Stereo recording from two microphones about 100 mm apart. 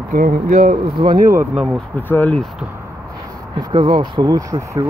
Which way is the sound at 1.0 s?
50° right (ahead or behind).